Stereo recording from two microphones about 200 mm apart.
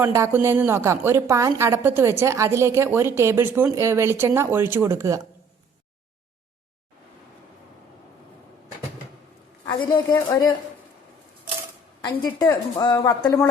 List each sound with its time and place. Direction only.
0.0 s a woman's voice: 10° right (ahead or behind)
9.6 s a woman's voice: 20° left (ahead or behind)
12.0 s a woman's voice: 20° left (ahead or behind)